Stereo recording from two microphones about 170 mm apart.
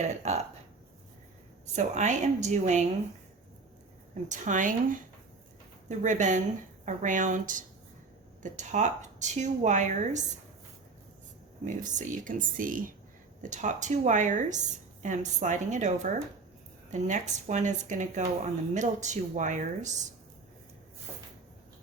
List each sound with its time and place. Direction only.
0.0 s speech: 40° right (ahead or behind)
1.7 s speech: 45° right (ahead or behind)
4.3 s speech: 45° right (ahead or behind)
11.6 s speech: 45° right (ahead or behind)